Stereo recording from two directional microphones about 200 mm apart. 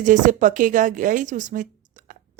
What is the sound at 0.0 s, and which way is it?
Speech, 40° right (ahead or behind).